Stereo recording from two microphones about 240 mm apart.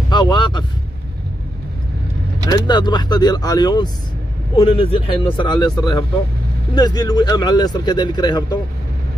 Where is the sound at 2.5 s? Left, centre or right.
Centre.